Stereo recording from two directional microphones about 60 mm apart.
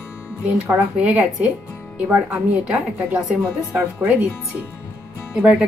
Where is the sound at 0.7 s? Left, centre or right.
Right.